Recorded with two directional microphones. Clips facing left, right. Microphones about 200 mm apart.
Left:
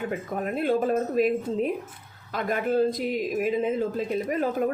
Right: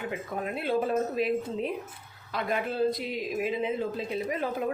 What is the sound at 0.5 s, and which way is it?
Speech, 45° left (ahead or behind).